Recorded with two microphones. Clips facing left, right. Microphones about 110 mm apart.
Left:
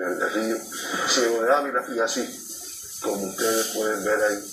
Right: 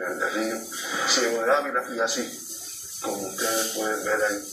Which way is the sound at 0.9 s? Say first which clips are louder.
Left 2 dB; 5° left (ahead or behind).